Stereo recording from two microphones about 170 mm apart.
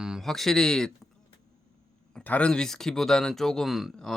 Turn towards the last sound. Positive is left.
turn(degrees=0)  # may be behind; listen again after turning